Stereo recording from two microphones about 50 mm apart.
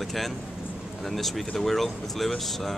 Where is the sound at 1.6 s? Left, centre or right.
Centre.